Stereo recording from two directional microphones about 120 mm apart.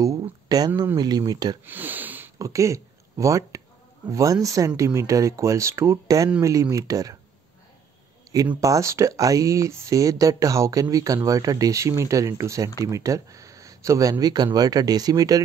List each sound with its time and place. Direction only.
0.0 s a sound: 30° right (ahead or behind)
0.9 s speech: 35° right (ahead or behind)
1.7 s sniff: 15° right (ahead or behind)
2.3 s speech: 25° right (ahead or behind)
8.5 s speech: 25° right (ahead or behind)